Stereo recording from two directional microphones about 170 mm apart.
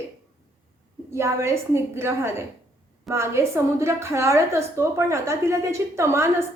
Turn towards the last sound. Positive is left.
turn(degrees=-15)  # may be behind; listen again after turning